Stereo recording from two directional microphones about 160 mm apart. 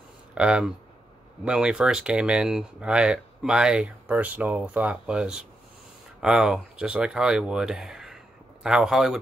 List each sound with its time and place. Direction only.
0.3 s speech: 5° right (ahead or behind)